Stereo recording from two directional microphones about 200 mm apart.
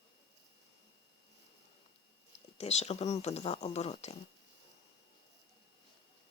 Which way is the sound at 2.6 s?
30° left (ahead or behind).